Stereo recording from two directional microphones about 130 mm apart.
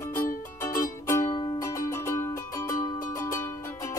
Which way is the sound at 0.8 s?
25° left (ahead or behind).